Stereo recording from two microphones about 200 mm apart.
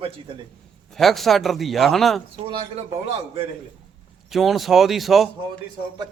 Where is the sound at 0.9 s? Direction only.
Centre (ahead or behind).